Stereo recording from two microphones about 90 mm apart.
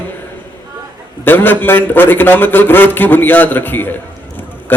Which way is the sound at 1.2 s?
20° left (ahead or behind).